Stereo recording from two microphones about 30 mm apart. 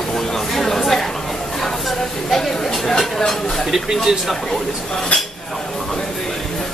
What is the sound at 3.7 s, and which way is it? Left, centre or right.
Speech, centre.